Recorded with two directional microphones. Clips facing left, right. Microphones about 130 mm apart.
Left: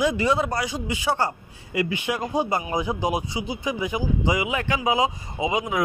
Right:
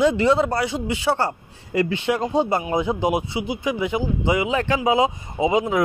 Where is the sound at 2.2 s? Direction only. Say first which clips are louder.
Right 1 dB; 25° right (ahead or behind).